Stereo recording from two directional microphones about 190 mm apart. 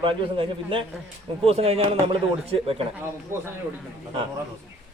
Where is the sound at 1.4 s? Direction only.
30° right (ahead or behind).